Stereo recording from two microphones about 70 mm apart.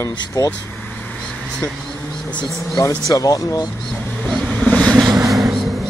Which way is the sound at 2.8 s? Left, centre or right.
Left.